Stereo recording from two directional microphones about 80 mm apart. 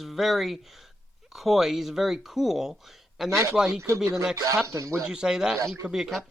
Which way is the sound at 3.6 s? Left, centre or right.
Centre.